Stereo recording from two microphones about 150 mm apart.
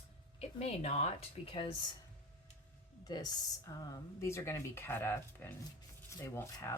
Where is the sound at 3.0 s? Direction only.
25° left (ahead or behind).